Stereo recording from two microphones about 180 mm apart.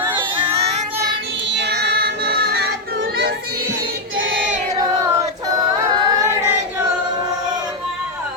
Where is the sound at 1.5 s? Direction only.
70° right (ahead or behind).